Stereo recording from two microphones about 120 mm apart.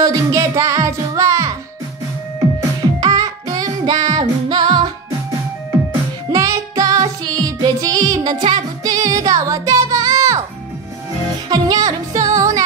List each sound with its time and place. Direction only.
0.0 s music: 30° right (ahead or behind)
3.0 s music: 30° right (ahead or behind)
6.3 s music: 30° right (ahead or behind)
11.4 s music: 30° right (ahead or behind)